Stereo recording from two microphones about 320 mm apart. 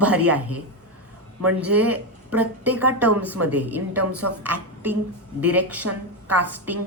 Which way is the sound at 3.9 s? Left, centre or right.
Right.